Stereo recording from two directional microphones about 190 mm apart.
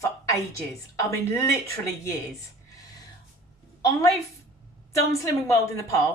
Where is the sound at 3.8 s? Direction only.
20° left (ahead or behind).